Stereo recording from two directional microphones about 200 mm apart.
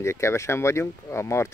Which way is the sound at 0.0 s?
15° left (ahead or behind).